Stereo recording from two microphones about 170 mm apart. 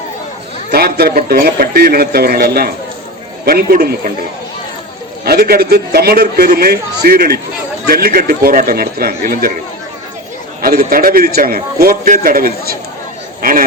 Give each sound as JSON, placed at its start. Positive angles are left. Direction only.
{"t": 0.7, "sound": "a man's voice", "side_deg": -65}
{"t": 5.2, "sound": "a man's voice", "side_deg": -65}
{"t": 10.6, "sound": "a man's voice", "side_deg": -60}